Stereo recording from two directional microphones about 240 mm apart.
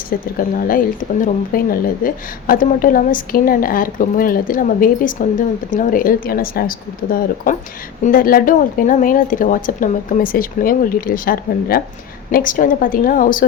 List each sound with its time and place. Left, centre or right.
0.1 s a woman's voice: left